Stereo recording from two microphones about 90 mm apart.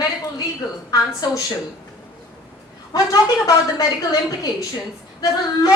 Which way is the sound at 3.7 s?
40° left (ahead or behind).